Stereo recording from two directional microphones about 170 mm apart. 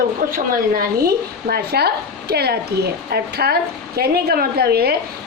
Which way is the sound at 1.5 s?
70° right (ahead or behind).